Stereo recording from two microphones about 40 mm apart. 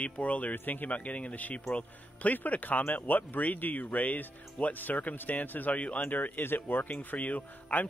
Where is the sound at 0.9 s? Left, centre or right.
Left.